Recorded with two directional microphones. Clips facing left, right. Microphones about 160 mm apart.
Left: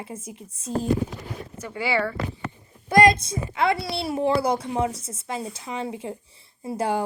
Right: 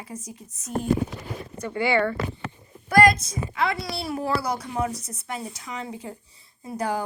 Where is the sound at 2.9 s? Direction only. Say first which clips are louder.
Left 1 dB; 25° left (ahead or behind).